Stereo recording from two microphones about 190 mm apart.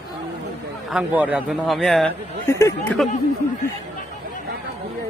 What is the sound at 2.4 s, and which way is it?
Speech, 15° left (ahead or behind).